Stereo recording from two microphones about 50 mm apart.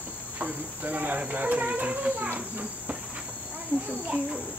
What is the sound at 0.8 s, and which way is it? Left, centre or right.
Speech, right.